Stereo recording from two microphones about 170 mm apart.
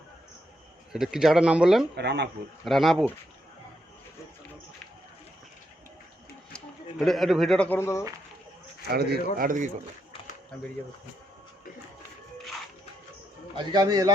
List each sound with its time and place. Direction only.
0.9 s a man's voice: 5° right (ahead or behind)
2.0 s speech: 80° right
2.6 s a man's voice: centre (ahead or behind)
7.0 s a man's voice: centre (ahead or behind)
8.9 s speech: 65° right (ahead or behind)
13.6 s a man's voice: 25° right (ahead or behind)